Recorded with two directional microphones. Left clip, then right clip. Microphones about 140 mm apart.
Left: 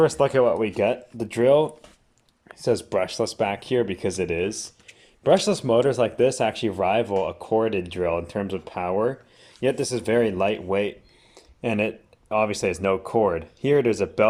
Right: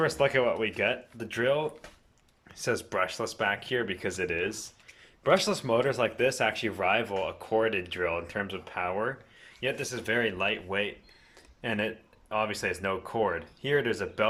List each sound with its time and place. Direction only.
0.0 s speech: 20° left (ahead or behind)
2.6 s speech: 25° left (ahead or behind)